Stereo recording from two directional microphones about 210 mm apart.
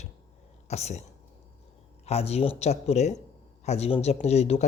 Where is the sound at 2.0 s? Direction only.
30° left (ahead or behind).